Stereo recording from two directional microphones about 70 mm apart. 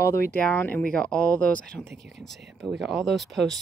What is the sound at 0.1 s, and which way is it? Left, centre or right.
Speech, left.